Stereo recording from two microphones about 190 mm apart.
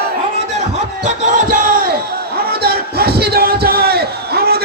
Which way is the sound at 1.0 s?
45° right (ahead or behind).